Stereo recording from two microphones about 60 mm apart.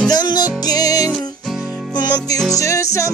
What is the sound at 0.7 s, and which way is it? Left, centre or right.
Music, left.